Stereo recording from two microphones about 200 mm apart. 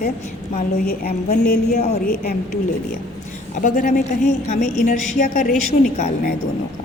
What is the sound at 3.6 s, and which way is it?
A woman's voice, 40° left (ahead or behind).